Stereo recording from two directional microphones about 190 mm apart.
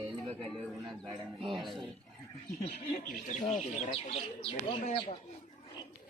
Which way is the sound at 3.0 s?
40° left (ahead or behind).